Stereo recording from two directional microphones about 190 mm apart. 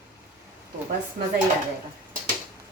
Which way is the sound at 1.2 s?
55° right (ahead or behind).